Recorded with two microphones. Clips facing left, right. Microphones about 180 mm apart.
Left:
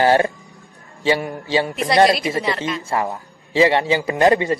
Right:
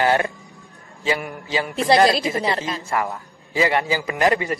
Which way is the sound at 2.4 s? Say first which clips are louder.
Left 1 dB; 35° right (ahead or behind).